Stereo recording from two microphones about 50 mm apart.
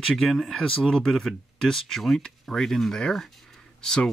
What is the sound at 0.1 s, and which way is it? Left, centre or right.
Speech, centre.